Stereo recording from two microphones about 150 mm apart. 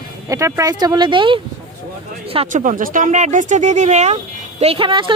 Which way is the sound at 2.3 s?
50° right (ahead or behind).